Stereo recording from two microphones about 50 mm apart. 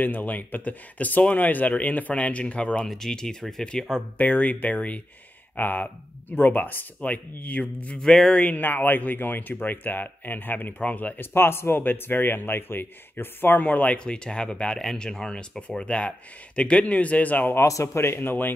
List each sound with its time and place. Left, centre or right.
0.0 s speech: left
2.8 s speech: centre
4.2 s speech: left
8.0 s speech: centre
8.5 s speech: left
11.3 s speech: left
13.6 s speech: left
13.9 s speech: centre
17.6 s speech: left
18.0 s speech: left